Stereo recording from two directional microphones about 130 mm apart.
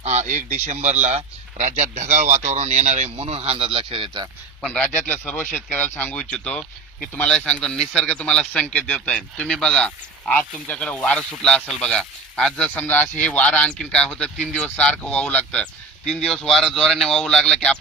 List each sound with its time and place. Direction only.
0.0 s speech: 60° right (ahead or behind); by 4.3 s 35° right (ahead or behind)
4.6 s speech: 10° left (ahead or behind)